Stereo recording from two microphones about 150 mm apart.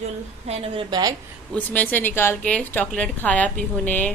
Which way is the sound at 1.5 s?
10° left (ahead or behind).